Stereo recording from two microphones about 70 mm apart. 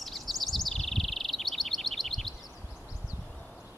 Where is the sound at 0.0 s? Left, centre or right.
Centre.